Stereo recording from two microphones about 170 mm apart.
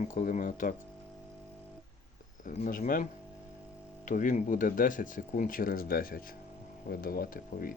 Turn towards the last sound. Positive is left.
turn(degrees=55)  # may be behind; listen again after turning